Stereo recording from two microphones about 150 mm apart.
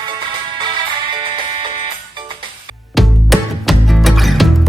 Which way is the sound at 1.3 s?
35° right (ahead or behind).